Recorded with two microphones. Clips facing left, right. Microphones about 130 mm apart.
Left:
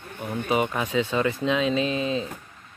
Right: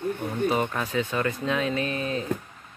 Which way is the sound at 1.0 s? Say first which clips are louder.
Left 3 dB; 25° left (ahead or behind).